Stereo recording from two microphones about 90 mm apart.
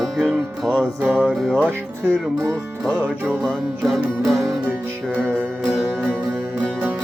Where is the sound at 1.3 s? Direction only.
5° left (ahead or behind).